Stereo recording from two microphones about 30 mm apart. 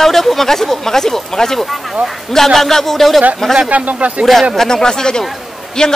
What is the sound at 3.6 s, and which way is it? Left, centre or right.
Speech, right.